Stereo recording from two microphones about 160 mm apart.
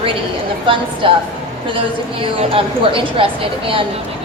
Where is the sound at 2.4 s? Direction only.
35° right (ahead or behind).